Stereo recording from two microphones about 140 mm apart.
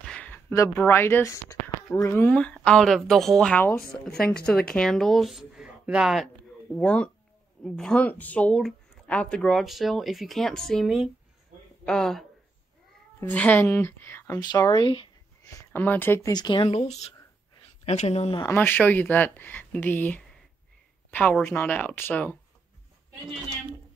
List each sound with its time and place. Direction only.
0.0 s speech: 5° left (ahead or behind)
3.9 s speech: 15° left (ahead or behind); by 6.2 s 5° right (ahead or behind)
6.7 s speech: 10° left (ahead or behind)
14.4 s speech: 30° left (ahead or behind)
15.4 s speech: 20° left (ahead or behind)
16.3 s speech: 30° left (ahead or behind)
16.6 s speech: 45° left (ahead or behind)
18.5 s speech: 15° left (ahead or behind)